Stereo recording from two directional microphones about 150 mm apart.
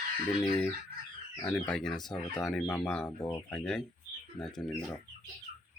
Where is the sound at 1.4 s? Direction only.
10° left (ahead or behind).